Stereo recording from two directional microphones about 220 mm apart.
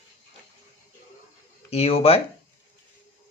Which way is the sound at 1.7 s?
25° left (ahead or behind).